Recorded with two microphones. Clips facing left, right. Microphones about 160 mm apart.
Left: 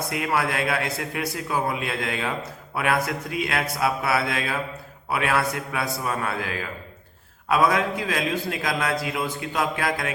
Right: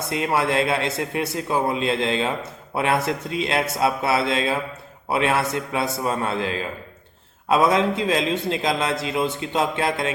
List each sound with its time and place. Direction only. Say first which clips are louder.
0.1 s a man's voice: right 5 dB; 25° right (ahead or behind)